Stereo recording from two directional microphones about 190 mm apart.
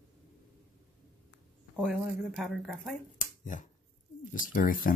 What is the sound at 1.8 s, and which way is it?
Speech, centre (ahead or behind).